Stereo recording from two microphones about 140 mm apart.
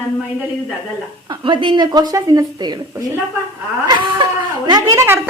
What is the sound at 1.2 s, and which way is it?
A woman's voice, 35° right (ahead or behind).